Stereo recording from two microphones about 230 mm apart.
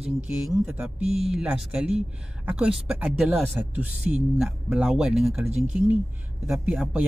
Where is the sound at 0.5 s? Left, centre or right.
Centre.